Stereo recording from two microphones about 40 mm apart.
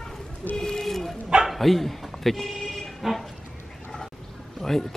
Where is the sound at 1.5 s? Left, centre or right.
Centre.